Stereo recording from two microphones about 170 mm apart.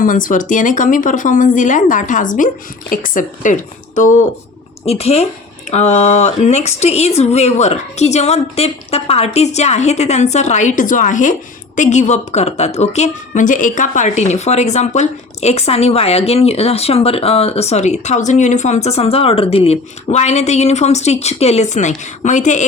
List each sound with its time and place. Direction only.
0.0 s a woman's voice: 50° left (ahead or behind)